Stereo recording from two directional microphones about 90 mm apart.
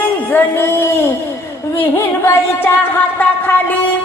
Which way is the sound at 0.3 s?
25° left (ahead or behind).